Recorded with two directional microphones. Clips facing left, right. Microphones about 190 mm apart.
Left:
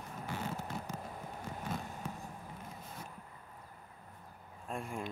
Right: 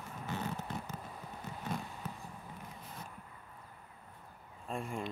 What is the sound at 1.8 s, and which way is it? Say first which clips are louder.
Vehicle: left 2 dB; 45° left (ahead or behind).